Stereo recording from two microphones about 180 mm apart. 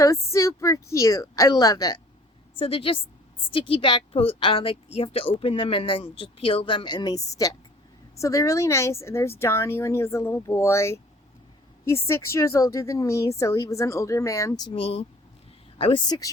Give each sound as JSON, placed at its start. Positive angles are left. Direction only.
{"t": 0.0, "sound": "a woman's voice", "side_deg": 15}
{"t": 2.6, "sound": "a woman's voice", "side_deg": 30}
{"t": 12.0, "sound": "a woman's voice", "side_deg": 15}